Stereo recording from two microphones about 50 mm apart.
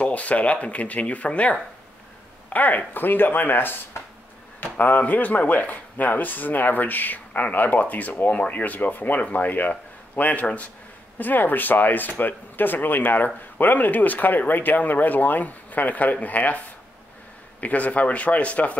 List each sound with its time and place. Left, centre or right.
0.0 s speech: left